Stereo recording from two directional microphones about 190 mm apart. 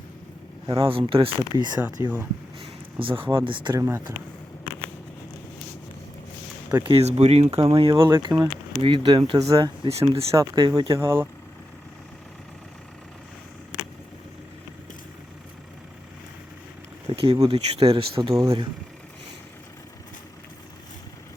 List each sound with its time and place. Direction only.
0.9 s speech: 30° right (ahead or behind)
2.0 s speech: 10° right (ahead or behind)
3.0 s speech: 30° right (ahead or behind)
6.7 s speech: 15° right (ahead or behind)
6.9 s speech: 35° right (ahead or behind); by 11.3 s 15° right (ahead or behind)
17.1 s speech: 25° right (ahead or behind)